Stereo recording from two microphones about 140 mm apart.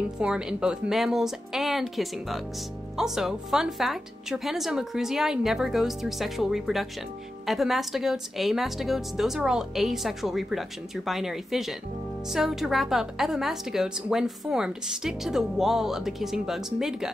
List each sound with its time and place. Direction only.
0.2 s a woman's voice: 5° right (ahead or behind)